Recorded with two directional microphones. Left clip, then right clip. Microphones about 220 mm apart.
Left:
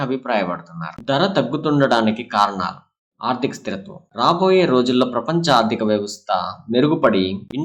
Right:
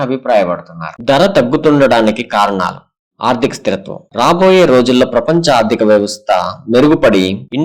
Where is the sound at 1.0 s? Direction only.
35° right (ahead or behind).